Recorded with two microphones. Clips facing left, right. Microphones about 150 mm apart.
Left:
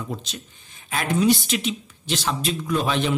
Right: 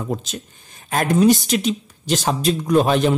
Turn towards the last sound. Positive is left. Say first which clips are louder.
# right 7 dB
turn(degrees=-45)  # may be behind; listen again after turning